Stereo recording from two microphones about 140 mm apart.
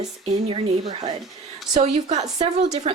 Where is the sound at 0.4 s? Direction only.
35° right (ahead or behind).